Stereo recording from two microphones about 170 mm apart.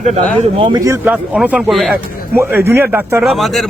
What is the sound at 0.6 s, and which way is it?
Speech, 20° right (ahead or behind).